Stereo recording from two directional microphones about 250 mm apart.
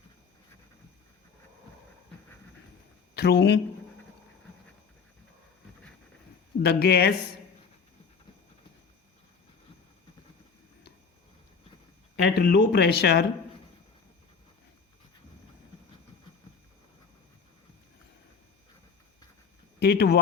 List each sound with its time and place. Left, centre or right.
3.2 s speech: left
6.6 s speech: left
12.1 s speech: left
19.8 s speech: left